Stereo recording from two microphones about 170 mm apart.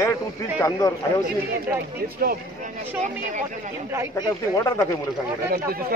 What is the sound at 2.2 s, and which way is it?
Speech, 60° right (ahead or behind).